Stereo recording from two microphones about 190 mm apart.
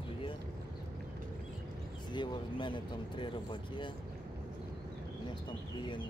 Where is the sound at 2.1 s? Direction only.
25° left (ahead or behind).